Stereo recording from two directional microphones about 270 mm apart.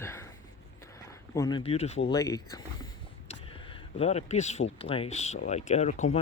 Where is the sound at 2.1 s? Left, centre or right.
Centre.